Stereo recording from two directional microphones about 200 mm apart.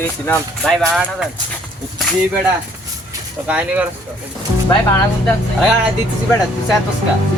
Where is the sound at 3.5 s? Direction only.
5° right (ahead or behind).